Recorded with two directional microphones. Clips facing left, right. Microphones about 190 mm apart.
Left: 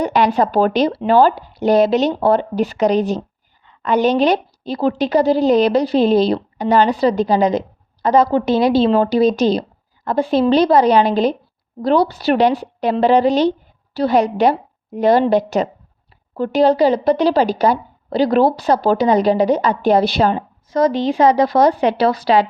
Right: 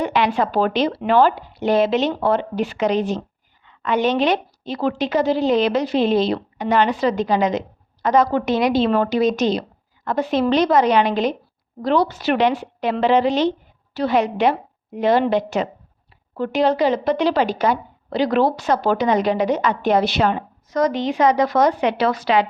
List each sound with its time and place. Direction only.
0.0 s a woman's voice: 40° left (ahead or behind)